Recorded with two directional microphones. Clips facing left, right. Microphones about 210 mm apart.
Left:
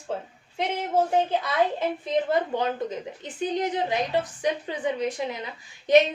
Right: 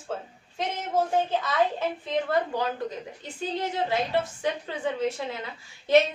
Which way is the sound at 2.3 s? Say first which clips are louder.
Left 2 dB; 20° left (ahead or behind).